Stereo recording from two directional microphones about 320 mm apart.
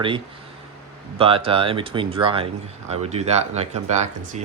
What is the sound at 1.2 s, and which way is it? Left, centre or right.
Speech, centre.